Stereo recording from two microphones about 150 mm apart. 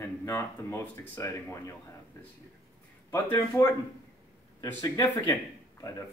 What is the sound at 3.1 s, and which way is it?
Speech, 20° left (ahead or behind).